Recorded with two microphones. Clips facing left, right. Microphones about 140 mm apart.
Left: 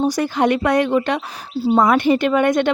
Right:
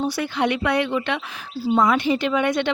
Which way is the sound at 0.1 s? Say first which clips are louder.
Left 5 dB; 40° left (ahead or behind).